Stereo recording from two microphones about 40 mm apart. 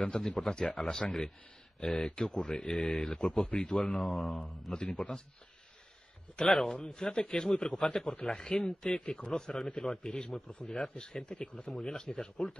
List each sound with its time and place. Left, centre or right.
0.0 s a man's voice: left
6.3 s a man's voice: centre
11.7 s speech: centre